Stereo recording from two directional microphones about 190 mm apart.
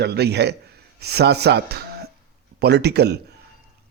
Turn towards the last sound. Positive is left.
turn(degrees=-60)  # may be behind; listen again after turning